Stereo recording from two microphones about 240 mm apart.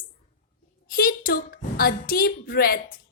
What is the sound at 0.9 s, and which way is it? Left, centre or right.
A woman's voice, left.